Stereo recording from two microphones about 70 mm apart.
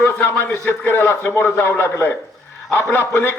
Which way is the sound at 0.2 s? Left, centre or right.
Left.